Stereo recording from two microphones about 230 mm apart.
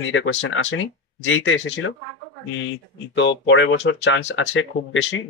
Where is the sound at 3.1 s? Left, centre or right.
Left.